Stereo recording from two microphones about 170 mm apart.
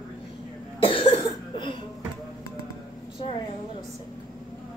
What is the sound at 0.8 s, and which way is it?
Cough, 30° left (ahead or behind).